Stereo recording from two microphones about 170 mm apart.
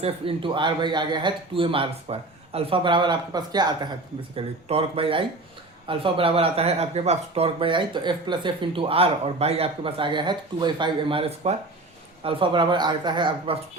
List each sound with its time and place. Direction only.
0.0 s speech: 35° right (ahead or behind)